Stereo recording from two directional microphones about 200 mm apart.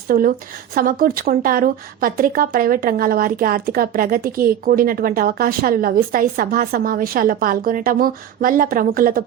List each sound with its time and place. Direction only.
0.1 s speech: 45° right (ahead or behind)